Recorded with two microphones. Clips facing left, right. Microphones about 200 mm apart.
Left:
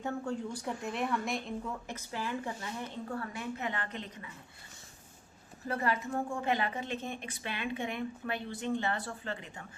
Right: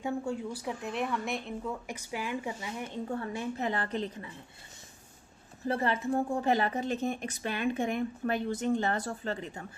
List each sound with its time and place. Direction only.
0.0 s a woman's voice: 10° right (ahead or behind)
1.9 s speech: 15° right (ahead or behind)
3.1 s speech: 25° right (ahead or behind)
5.6 s speech: 25° right (ahead or behind)